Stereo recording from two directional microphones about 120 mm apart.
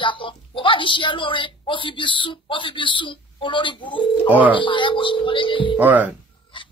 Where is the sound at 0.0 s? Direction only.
45° left (ahead or behind).